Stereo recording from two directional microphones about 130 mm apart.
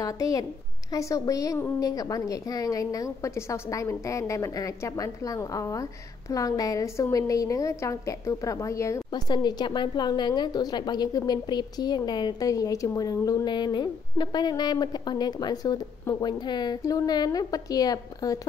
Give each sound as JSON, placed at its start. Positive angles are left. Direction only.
{"t": 0.0, "sound": "a woman's voice", "side_deg": 25}